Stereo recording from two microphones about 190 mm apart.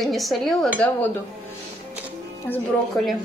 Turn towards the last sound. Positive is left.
turn(degrees=10)  # may be behind; listen again after turning